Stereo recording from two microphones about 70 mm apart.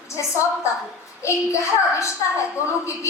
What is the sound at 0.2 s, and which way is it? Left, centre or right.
A woman's voice, left.